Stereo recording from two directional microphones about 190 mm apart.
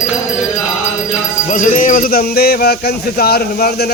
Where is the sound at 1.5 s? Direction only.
45° left (ahead or behind).